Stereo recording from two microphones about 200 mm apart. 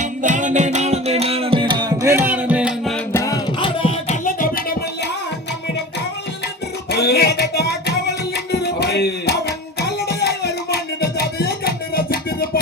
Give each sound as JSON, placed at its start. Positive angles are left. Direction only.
{"t": 0.0, "sound": "music", "side_deg": -40}
{"t": 3.1, "sound": "music", "side_deg": 15}
{"t": 4.3, "sound": "music", "side_deg": 45}
{"t": 6.9, "sound": "music", "side_deg": 55}
{"t": 8.6, "sound": "a sound", "side_deg": 55}
{"t": 9.8, "sound": "music", "side_deg": 55}